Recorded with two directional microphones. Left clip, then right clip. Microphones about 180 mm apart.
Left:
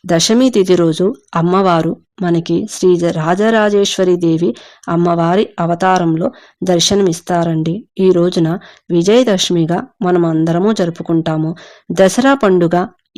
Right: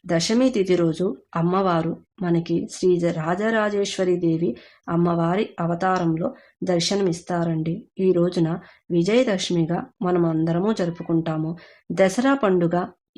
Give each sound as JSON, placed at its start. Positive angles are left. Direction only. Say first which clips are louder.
{"t": 0.1, "sound": "speech", "louder": "left 9 dB", "side_deg": 45}